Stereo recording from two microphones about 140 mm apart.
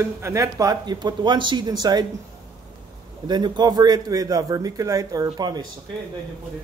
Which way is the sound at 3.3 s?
30° right (ahead or behind).